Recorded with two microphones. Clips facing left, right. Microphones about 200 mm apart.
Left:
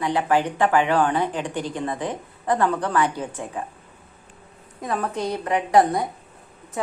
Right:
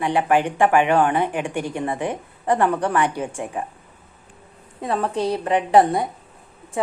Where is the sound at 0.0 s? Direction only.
15° right (ahead or behind).